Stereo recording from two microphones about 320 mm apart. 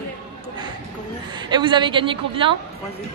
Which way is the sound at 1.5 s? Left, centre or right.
Centre.